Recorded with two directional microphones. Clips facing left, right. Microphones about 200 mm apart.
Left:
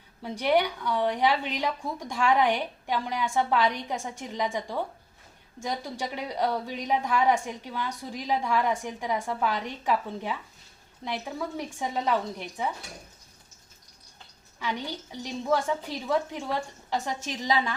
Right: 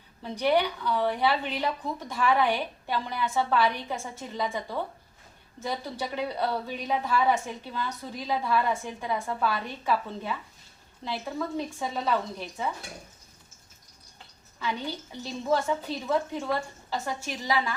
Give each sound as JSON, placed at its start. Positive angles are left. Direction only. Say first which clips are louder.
{"t": 0.4, "sound": "a woman's voice", "louder": "even", "side_deg": 15}
{"t": 14.6, "sound": "a woman's voice", "louder": "even", "side_deg": 15}